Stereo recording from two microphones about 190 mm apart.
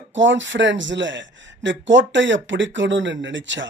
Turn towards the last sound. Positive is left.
turn(degrees=-75)  # may be behind; listen again after turning